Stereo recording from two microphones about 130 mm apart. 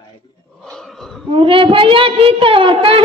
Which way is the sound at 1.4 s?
45° right (ahead or behind).